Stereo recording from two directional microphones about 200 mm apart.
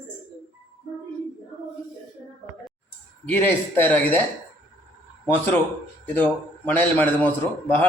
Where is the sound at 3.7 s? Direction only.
10° left (ahead or behind).